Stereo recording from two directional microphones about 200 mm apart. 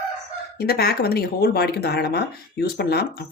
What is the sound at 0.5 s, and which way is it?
Speech, 50° left (ahead or behind).